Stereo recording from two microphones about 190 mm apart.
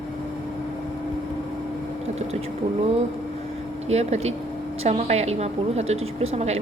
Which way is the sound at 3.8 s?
35° right (ahead or behind).